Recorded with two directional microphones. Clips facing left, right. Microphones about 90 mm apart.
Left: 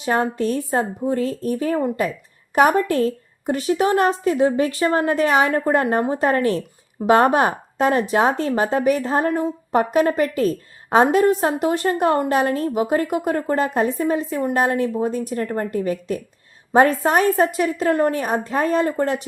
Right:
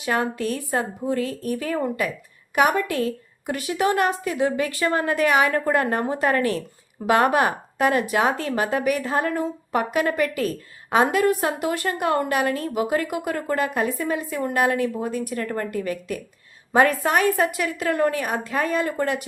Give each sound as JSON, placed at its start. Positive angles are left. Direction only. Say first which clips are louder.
{"t": 0.0, "sound": "a woman's voice", "louder": "left 4 dB", "side_deg": 30}
{"t": 2.6, "sound": "a woman's voice", "louder": "left 4 dB", "side_deg": 35}